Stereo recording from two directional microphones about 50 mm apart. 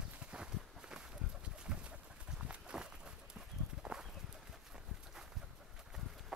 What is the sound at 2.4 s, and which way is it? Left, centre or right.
Run, centre.